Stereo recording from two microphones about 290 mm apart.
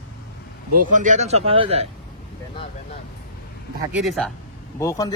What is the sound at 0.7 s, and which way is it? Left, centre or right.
Speech, right.